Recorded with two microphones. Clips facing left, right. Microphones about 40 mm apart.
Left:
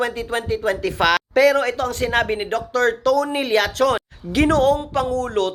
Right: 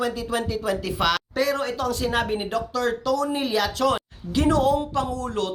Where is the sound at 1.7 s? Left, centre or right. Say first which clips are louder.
Left 4 dB; left.